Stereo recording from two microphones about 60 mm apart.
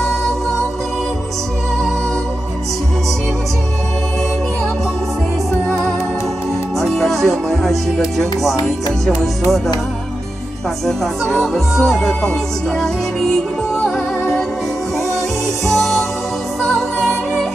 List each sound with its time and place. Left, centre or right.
6.8 s music: centre
10.9 s music: centre
13.7 s music: centre
15.6 s music: centre